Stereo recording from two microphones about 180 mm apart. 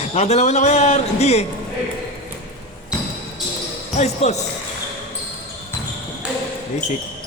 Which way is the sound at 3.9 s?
40° left (ahead or behind).